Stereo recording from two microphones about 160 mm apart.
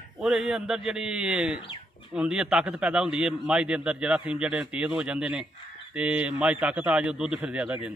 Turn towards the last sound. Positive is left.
turn(degrees=-5)  # may be behind; listen again after turning